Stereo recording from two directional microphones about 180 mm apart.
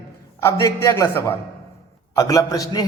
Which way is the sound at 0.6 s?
15° left (ahead or behind).